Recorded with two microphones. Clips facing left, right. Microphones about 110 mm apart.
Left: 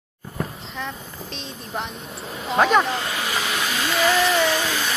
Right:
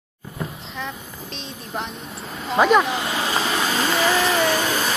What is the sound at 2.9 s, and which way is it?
Vehicle, 20° right (ahead or behind).